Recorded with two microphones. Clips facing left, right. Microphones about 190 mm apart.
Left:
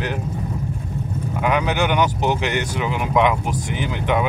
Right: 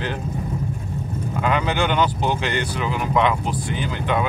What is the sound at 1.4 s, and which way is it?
Speech, 15° left (ahead or behind).